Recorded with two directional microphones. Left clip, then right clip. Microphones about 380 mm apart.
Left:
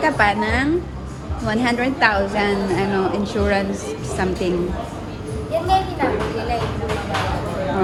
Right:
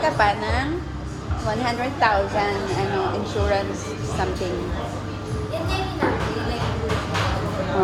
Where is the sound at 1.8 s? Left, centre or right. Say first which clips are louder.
Left 1 dB; centre.